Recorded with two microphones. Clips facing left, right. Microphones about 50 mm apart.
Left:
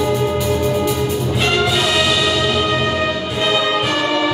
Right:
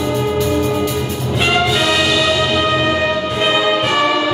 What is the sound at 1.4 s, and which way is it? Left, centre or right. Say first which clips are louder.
Music: right 3 dB; centre.